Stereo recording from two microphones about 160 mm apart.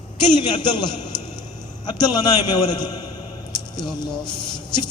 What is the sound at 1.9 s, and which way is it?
A man's voice, 25° left (ahead or behind).